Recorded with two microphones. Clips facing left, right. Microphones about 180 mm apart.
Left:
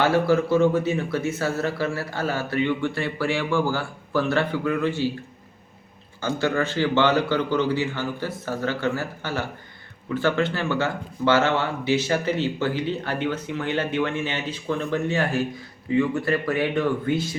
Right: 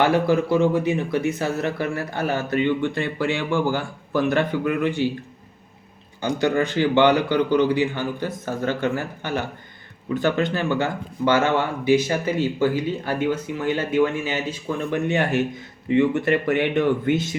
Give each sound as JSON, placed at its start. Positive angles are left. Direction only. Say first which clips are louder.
{"t": 0.0, "sound": "speech", "louder": "right 1 dB", "side_deg": -15}
{"t": 6.2, "sound": "speech", "louder": "right 3 dB", "side_deg": -15}